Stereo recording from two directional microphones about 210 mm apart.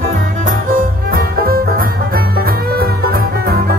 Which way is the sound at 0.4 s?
40° right (ahead or behind).